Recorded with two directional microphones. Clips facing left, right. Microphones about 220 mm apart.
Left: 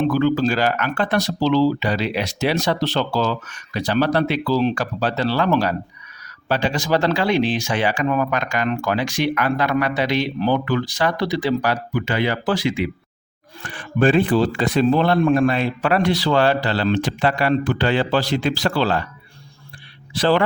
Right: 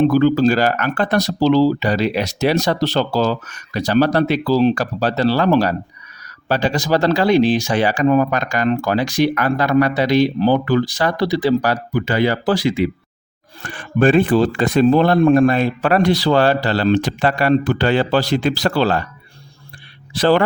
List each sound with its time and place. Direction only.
0.1 s speech: 40° right (ahead or behind)
20.1 s a man's voice: 40° right (ahead or behind)